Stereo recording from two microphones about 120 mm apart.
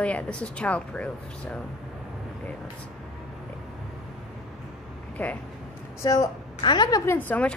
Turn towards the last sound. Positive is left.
turn(degrees=10)  # may be behind; listen again after turning